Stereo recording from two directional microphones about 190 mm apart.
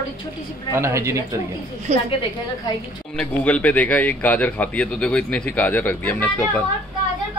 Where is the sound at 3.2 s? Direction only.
5° left (ahead or behind).